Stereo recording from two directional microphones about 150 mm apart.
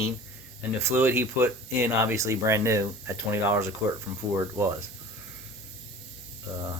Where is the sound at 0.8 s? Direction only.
15° right (ahead or behind).